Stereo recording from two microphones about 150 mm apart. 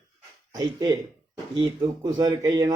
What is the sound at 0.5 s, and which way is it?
Speech, 25° right (ahead or behind).